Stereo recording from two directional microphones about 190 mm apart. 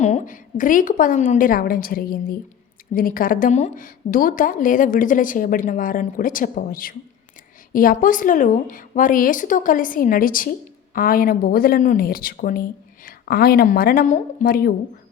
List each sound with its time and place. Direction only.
0.0 s a woman's voice: 40° left (ahead or behind)